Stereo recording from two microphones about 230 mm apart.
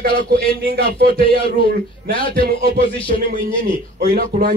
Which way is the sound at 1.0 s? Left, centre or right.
Left.